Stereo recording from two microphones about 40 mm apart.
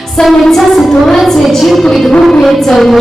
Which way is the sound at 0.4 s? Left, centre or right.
Centre.